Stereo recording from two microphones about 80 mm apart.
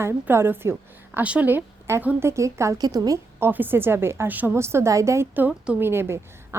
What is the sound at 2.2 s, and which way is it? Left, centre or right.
Speech, right.